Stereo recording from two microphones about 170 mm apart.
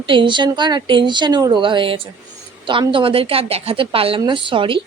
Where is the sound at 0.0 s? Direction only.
30° right (ahead or behind).